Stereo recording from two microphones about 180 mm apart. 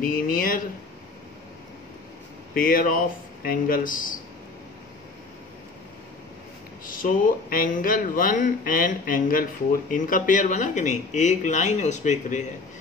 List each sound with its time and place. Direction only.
0.0 s speech: 50° left (ahead or behind)
2.5 s speech: 50° left (ahead or behind)
6.9 s speech: 50° left (ahead or behind)